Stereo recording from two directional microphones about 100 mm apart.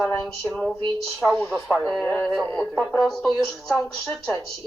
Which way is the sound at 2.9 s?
Centre (ahead or behind).